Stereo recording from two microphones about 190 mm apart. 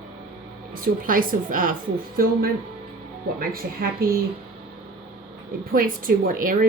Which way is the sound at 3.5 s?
50° right (ahead or behind).